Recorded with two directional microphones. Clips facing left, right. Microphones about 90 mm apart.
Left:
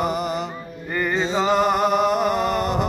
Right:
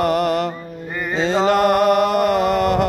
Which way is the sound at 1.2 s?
85° right.